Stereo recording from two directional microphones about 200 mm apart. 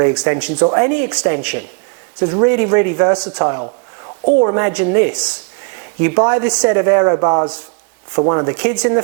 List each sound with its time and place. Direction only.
0.1 s speech: 10° right (ahead or behind)
0.6 s speech: 20° right (ahead or behind)
8.5 s speech: 10° right (ahead or behind)